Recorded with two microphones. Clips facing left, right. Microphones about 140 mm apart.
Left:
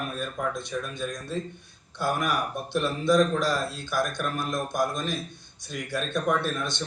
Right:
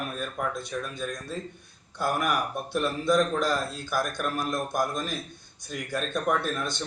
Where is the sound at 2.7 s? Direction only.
5° right (ahead or behind).